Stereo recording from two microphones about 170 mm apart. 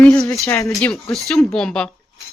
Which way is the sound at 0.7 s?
5° left (ahead or behind).